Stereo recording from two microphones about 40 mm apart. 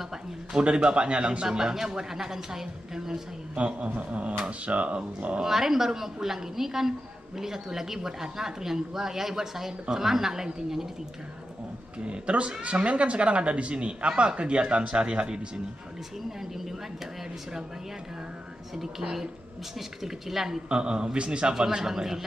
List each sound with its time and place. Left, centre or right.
0.7 s a woman's voice: right
3.5 s speech: right
5.4 s a woman's voice: centre
12.0 s a woman's voice: right
16.3 s a woman's voice: centre
18.8 s a woman's voice: centre
20.6 s a woman's voice: right